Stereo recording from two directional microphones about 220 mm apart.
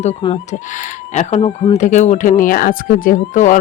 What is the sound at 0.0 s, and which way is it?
Speech, 30° left (ahead or behind).